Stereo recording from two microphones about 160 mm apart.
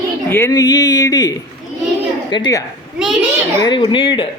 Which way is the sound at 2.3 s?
25° left (ahead or behind).